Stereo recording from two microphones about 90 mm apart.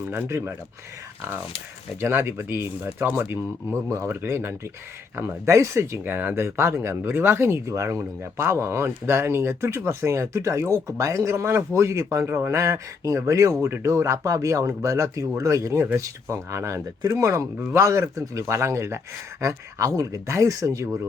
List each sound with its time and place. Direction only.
0.1 s speech: 25° right (ahead or behind)
2.0 s speech: 25° right (ahead or behind)
3.8 s speech: 35° right (ahead or behind)